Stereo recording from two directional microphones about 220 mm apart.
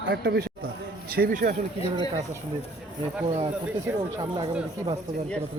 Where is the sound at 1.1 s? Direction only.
40° right (ahead or behind).